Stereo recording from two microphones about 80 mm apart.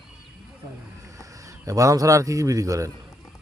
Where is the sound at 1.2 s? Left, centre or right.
Right.